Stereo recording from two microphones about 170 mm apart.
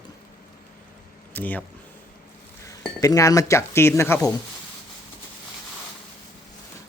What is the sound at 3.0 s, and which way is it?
Speech, 20° left (ahead or behind).